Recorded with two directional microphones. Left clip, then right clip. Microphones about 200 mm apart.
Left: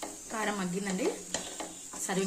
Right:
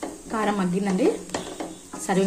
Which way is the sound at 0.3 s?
Centre (ahead or behind).